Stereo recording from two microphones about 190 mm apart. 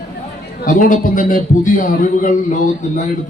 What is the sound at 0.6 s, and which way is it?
Speech, 45° left (ahead or behind).